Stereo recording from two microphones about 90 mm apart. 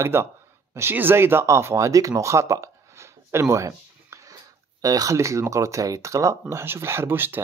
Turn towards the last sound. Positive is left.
turn(degrees=-25)  # may be behind; listen again after turning